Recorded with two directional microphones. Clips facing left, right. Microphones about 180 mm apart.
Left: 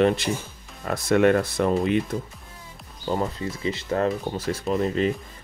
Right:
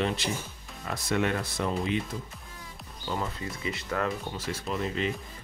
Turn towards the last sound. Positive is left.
turn(degrees=40)  # may be behind; listen again after turning